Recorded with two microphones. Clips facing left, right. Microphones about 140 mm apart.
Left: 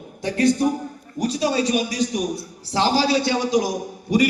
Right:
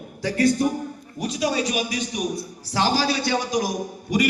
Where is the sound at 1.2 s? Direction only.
30° left (ahead or behind).